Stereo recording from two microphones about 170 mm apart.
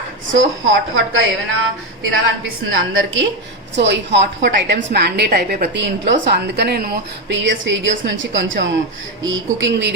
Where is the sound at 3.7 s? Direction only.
90° right.